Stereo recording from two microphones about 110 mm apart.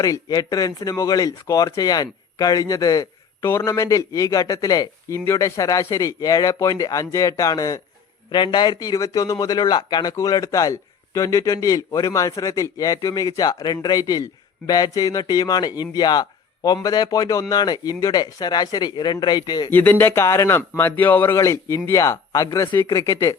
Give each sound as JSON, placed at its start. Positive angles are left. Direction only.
{"t": 0.0, "sound": "speech", "side_deg": 35}
{"t": 19.7, "sound": "speech", "side_deg": 15}